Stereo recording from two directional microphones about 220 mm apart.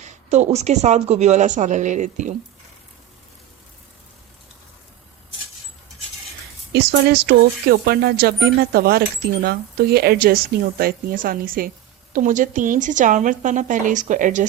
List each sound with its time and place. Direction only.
0.0 s a woman's voice: 30° right (ahead or behind)
6.7 s a woman's voice: 45° right (ahead or behind)